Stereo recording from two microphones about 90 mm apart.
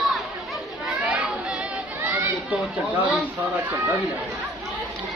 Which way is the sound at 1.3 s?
5° right (ahead or behind).